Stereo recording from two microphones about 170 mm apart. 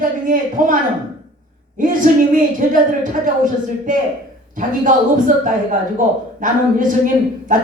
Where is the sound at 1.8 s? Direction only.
50° right (ahead or behind).